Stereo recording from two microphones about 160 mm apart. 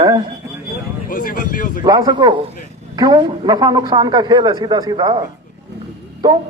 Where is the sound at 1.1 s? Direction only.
60° left (ahead or behind).